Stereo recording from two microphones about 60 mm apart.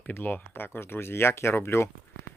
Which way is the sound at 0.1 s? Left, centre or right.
Left.